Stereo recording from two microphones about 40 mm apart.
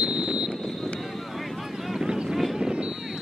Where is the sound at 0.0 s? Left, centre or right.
Right.